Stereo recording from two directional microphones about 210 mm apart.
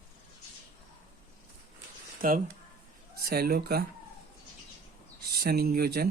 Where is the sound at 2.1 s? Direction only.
40° right (ahead or behind).